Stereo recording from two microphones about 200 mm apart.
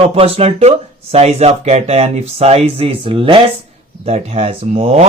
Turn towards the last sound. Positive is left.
turn(degrees=-30)  # may be behind; listen again after turning